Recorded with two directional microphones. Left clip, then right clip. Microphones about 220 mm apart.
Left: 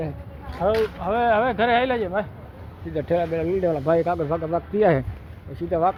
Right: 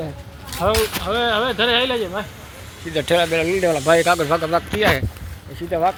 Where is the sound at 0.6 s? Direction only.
35° right (ahead or behind).